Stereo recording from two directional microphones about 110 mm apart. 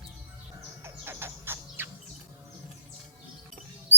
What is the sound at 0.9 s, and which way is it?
Bird, 20° right (ahead or behind).